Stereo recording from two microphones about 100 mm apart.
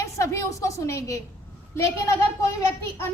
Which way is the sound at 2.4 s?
30° left (ahead or behind).